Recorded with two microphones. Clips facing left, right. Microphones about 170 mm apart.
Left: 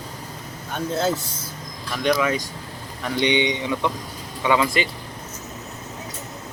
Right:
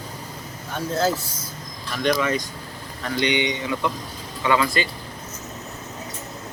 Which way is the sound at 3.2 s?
20° left (ahead or behind).